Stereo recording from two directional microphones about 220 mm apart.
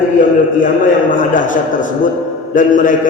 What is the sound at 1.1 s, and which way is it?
A man's voice, 35° left (ahead or behind).